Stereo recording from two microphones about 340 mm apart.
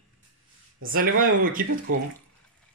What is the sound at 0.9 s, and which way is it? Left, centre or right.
Speech, right.